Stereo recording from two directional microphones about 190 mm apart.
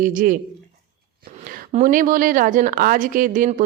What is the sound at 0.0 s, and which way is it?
Speech, 45° right (ahead or behind).